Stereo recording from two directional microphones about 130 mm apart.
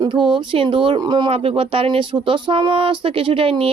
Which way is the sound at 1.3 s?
45° right (ahead or behind).